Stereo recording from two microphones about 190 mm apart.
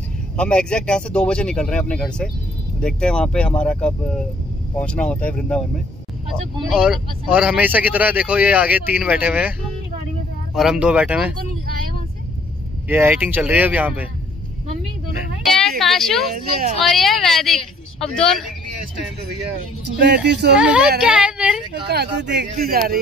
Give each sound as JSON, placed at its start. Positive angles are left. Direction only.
{"t": 0.4, "sound": "speech", "side_deg": 5}
{"t": 6.7, "sound": "speech", "side_deg": -5}
{"t": 10.5, "sound": "speech", "side_deg": -5}
{"t": 12.8, "sound": "speech", "side_deg": -10}
{"t": 15.8, "sound": "a sound", "side_deg": 0}
{"t": 16.8, "sound": "speech", "side_deg": 0}
{"t": 20.2, "sound": "speech", "side_deg": -65}
{"t": 20.5, "sound": "speech", "side_deg": -5}
{"t": 21.8, "sound": "speech", "side_deg": -60}